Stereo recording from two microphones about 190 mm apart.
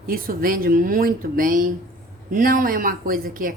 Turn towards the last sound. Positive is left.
turn(degrees=-45)  # may be behind; listen again after turning